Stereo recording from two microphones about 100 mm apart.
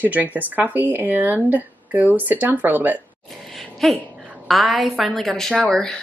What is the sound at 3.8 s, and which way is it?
Speech, centre (ahead or behind).